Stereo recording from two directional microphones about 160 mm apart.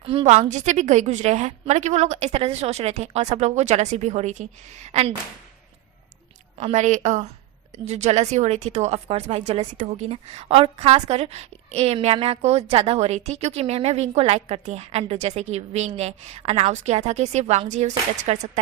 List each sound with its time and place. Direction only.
0.0 s a woman's voice: 35° right (ahead or behind)
6.6 s a woman's voice: 45° right (ahead or behind)